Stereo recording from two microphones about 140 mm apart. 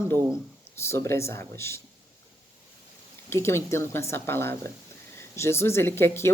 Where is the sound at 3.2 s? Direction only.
20° left (ahead or behind).